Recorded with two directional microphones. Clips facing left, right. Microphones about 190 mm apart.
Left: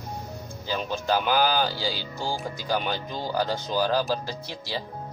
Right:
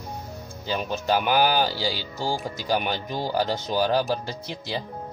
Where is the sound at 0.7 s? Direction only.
15° right (ahead or behind).